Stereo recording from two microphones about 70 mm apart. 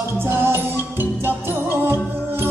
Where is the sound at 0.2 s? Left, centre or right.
Right.